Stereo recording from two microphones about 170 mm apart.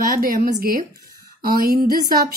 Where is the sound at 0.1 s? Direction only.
55° right (ahead or behind).